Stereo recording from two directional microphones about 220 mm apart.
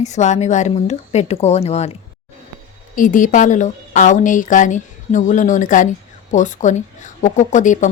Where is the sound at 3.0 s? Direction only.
35° left (ahead or behind).